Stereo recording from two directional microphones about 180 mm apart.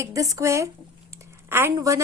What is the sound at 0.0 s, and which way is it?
A woman's voice, 20° right (ahead or behind).